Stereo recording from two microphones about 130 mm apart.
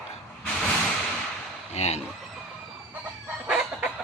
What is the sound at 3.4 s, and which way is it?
Chicken, 10° right (ahead or behind).